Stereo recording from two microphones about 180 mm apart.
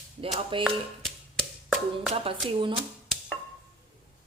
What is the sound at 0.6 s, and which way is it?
Clapping, centre (ahead or behind).